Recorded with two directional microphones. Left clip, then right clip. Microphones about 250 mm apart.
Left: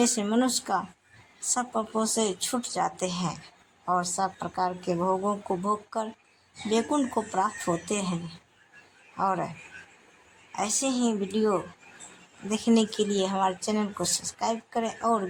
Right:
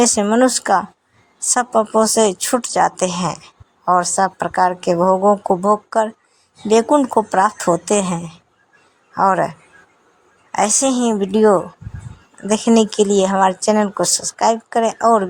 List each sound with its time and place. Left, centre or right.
0.0 s speech: right
10.5 s speech: right